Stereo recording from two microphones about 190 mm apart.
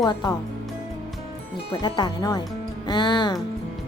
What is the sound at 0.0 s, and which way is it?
Speech, 20° left (ahead or behind).